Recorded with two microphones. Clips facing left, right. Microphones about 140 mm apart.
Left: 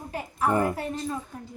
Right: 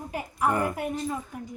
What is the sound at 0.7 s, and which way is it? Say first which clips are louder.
Speech: right 1 dB; 10° right (ahead or behind).